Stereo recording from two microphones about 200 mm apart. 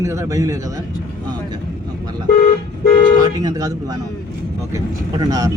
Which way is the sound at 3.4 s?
20° right (ahead or behind).